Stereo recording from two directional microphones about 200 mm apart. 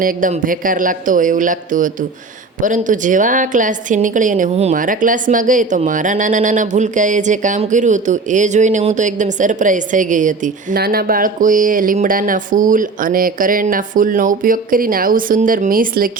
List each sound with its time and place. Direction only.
0.0 s a woman's voice: 40° right (ahead or behind)